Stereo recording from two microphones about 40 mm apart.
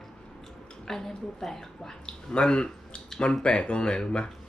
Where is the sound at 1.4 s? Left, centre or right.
Centre.